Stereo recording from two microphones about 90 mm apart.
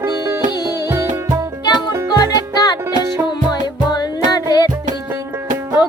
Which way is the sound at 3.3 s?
50° left (ahead or behind).